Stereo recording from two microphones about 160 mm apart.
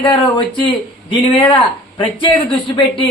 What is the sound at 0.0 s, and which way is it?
Speech, 30° left (ahead or behind).